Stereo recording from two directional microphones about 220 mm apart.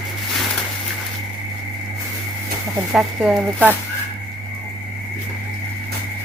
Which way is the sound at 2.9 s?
Centre (ahead or behind).